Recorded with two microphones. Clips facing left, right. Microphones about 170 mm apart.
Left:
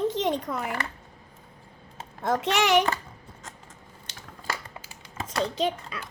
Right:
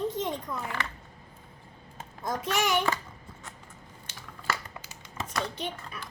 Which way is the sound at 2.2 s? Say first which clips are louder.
Left 5 dB; 75° left (ahead or behind).